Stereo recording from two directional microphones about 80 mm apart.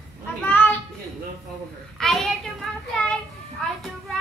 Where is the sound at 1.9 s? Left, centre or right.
Centre.